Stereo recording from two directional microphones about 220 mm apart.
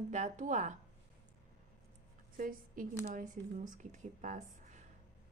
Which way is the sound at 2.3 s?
40° right (ahead or behind).